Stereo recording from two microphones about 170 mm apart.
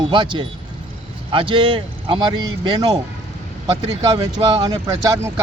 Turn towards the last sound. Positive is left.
turn(degrees=-20)  # may be behind; listen again after turning